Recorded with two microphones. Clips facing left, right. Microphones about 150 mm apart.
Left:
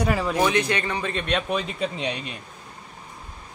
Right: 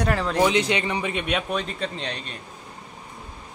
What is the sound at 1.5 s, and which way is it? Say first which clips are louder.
Speech: left 1 dB; 5° left (ahead or behind).